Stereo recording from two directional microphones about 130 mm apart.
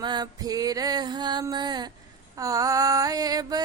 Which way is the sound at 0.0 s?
35° right (ahead or behind).